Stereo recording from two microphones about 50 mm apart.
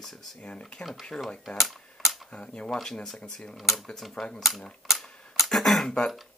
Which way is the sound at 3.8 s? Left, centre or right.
Centre.